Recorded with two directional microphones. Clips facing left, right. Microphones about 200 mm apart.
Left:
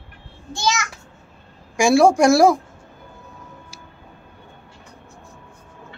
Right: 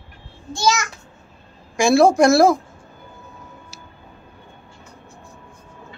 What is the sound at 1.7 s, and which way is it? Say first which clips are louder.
Speech: even; 10° left (ahead or behind).